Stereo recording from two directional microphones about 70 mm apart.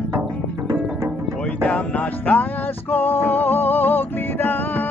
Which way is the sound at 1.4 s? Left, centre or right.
Centre.